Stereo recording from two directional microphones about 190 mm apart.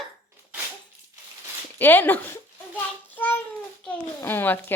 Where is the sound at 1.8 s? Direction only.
10° left (ahead or behind).